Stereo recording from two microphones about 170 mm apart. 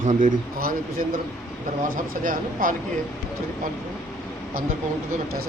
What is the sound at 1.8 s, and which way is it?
Speech, 55° right (ahead or behind).